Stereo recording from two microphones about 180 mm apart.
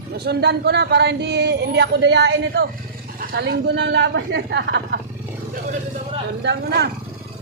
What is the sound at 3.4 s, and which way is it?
Speech, 70° right (ahead or behind).